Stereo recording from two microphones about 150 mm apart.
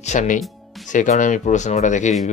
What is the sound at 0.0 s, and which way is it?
Speech, 55° left (ahead or behind).